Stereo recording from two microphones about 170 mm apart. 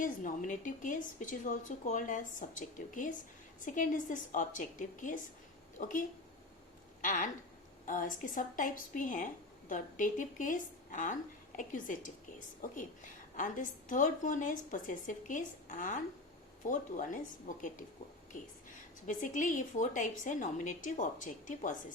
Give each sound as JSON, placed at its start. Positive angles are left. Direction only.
{"t": 0.0, "sound": "a woman's voice", "side_deg": 50}
{"t": 19.0, "sound": "a woman's voice", "side_deg": 50}